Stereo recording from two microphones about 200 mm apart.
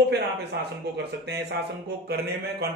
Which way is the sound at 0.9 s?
55° right (ahead or behind).